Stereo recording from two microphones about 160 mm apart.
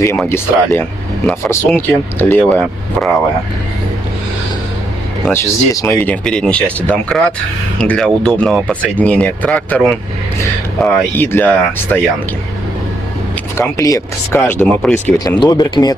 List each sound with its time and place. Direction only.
0.2 s speech: 15° left (ahead or behind)
5.3 s speech: 20° left (ahead or behind)
13.6 s speech: 20° left (ahead or behind)
15.1 s speech: 25° left (ahead or behind)